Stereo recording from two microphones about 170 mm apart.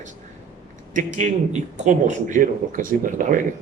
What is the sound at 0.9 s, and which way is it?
A man's voice, 45° right (ahead or behind).